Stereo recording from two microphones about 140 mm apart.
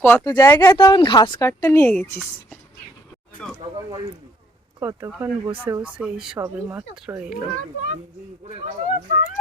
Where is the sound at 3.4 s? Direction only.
10° left (ahead or behind).